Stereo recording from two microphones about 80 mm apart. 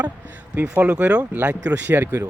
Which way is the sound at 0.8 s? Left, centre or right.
Centre.